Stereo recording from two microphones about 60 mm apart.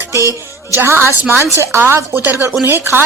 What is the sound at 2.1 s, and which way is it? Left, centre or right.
Speech, right.